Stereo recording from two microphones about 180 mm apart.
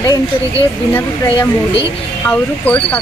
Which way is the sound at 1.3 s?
25° left (ahead or behind).